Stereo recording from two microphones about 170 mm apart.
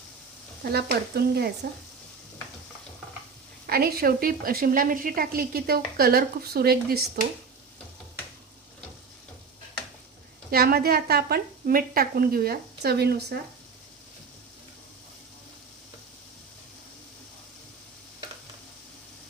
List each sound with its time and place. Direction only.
0.6 s speech: 70° right (ahead or behind)
3.7 s speech: 65° right (ahead or behind)
10.5 s speech: 65° right (ahead or behind)